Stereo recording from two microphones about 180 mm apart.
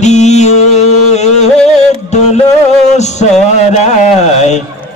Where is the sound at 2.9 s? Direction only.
40° left (ahead or behind).